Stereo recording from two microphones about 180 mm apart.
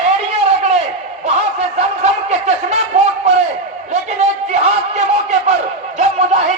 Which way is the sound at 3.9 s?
40° right (ahead or behind).